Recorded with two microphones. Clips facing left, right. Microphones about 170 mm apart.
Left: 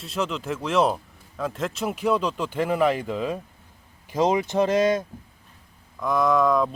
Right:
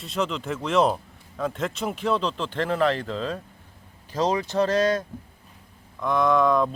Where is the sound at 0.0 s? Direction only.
Centre (ahead or behind); by 5.0 s 20° left (ahead or behind).